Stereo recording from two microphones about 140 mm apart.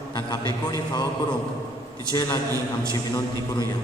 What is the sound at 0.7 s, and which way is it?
Speech, 30° left (ahead or behind).